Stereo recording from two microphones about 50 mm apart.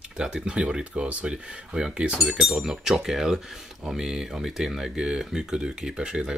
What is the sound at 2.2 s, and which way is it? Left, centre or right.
Speech, centre.